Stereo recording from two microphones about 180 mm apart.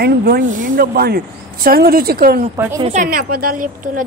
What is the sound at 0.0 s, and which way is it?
Speech, 60° right (ahead or behind).